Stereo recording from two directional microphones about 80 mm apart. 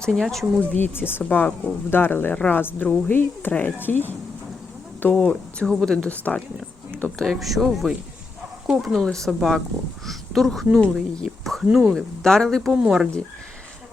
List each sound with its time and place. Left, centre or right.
0.0 s speech: centre
0.6 s speech: left
2.3 s speech: centre
2.6 s speech: left
7.3 s speech: centre
9.0 s speech: centre
11.2 s a sound: centre
11.6 s speech: centre
11.9 s speech: centre
12.7 s speech: centre